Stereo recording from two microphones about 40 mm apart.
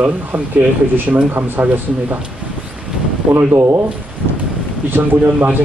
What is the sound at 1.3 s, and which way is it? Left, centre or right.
Speech, right.